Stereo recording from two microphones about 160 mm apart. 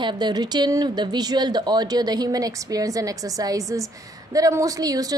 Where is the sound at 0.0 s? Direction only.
25° right (ahead or behind).